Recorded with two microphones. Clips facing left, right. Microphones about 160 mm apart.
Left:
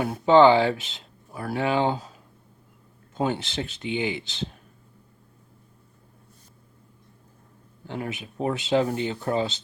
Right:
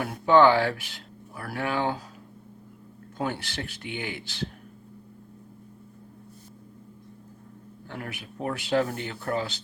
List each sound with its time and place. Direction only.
0.0 s speech: 20° left (ahead or behind)
3.2 s speech: 20° left (ahead or behind)
7.9 s speech: 20° left (ahead or behind)